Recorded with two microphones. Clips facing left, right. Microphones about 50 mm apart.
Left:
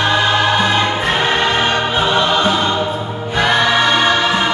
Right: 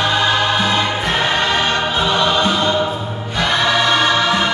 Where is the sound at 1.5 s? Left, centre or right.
Left.